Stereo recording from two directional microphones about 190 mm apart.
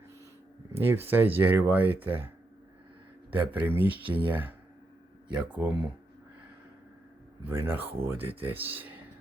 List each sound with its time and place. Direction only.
0.7 s speech: 10° right (ahead or behind)
3.3 s speech: 10° right (ahead or behind)
4.0 s speech: 25° right (ahead or behind)
4.3 s speech: 10° right (ahead or behind)
7.4 s speech: 10° right (ahead or behind)